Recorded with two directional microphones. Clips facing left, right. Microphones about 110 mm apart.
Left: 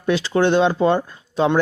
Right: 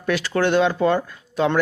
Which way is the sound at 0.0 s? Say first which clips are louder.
Left 3 dB; 25° left (ahead or behind).